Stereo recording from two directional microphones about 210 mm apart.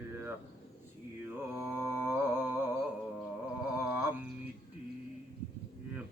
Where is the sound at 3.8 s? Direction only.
10° right (ahead or behind).